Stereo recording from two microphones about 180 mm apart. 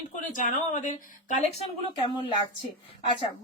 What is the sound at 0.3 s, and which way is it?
Speech, 45° left (ahead or behind).